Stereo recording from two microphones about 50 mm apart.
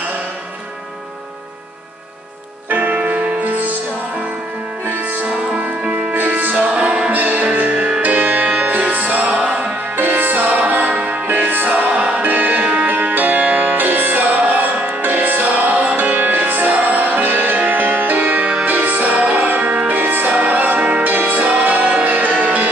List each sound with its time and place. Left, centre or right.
2.7 s music: right
4.8 s music: right
6.1 s music: right
6.5 s music: right
9.8 s music: right
12.2 s music: right